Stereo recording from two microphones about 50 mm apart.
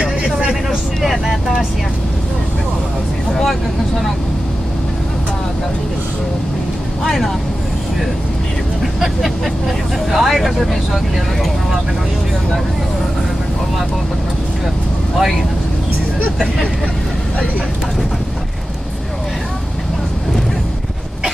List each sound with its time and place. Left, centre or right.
0.0 s a sound: centre
0.7 s speech: centre
7.0 s speech: centre
10.1 s speech: centre
15.1 s speech: centre